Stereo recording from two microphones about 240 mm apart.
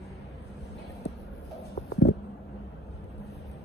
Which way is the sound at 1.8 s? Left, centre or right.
Left.